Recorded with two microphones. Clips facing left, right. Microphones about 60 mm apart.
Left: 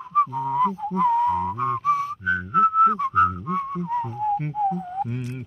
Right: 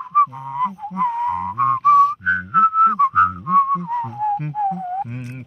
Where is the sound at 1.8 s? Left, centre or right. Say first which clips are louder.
Right 10 dB; right.